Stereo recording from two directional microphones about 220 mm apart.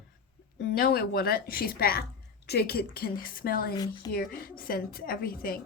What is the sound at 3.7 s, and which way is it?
Speech, 15° left (ahead or behind).